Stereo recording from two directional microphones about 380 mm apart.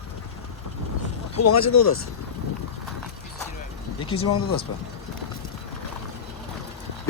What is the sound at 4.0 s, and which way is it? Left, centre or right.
Speech, centre.